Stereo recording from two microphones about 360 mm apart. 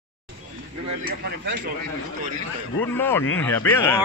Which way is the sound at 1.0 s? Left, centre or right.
Right.